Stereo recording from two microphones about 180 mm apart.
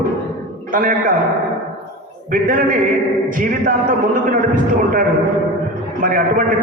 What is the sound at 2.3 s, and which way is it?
Speech, 50° right (ahead or behind).